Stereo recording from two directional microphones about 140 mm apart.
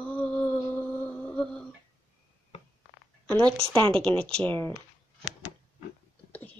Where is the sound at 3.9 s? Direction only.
5° left (ahead or behind).